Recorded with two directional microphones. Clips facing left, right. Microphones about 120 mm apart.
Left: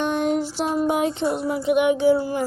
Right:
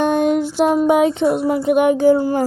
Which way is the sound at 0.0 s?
55° right (ahead or behind).